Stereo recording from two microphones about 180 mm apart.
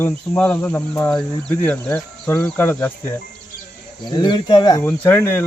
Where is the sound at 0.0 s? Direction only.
10° left (ahead or behind).